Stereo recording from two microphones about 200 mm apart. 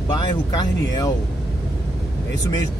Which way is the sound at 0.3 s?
20° left (ahead or behind).